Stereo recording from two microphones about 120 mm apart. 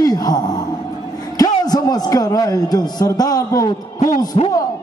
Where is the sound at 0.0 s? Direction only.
35° left (ahead or behind).